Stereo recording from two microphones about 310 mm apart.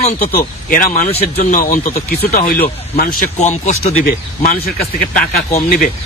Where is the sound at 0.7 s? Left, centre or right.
Left.